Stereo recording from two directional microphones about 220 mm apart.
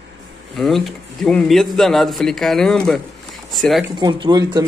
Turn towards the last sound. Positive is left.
turn(degrees=-20)  # may be behind; listen again after turning